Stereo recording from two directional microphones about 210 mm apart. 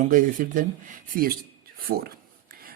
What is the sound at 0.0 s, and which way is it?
Speech, 40° right (ahead or behind).